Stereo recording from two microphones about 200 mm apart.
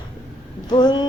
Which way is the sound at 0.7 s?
20° left (ahead or behind).